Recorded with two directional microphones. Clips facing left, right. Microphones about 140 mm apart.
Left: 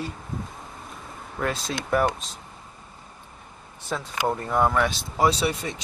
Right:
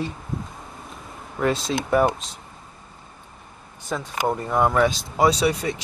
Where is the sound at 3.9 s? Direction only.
5° right (ahead or behind).